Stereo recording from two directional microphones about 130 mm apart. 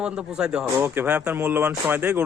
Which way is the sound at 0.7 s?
15° right (ahead or behind).